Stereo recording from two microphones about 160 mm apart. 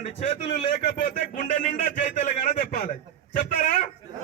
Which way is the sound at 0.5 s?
80° left.